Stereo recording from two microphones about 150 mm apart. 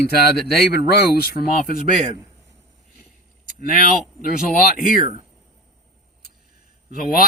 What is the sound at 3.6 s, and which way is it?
Speech, 65° left (ahead or behind).